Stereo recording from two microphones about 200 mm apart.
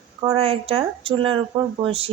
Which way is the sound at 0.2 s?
25° right (ahead or behind).